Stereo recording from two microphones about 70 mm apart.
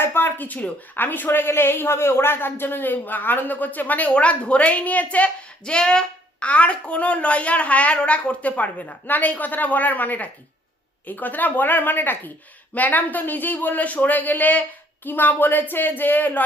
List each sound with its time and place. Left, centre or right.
0.0 s a woman's voice: left